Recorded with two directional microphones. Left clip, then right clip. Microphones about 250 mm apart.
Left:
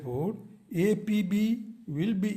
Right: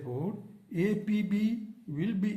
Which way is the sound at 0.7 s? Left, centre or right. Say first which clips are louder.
Left 4 dB; left.